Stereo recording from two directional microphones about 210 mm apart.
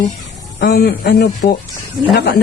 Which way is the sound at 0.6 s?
45° left (ahead or behind).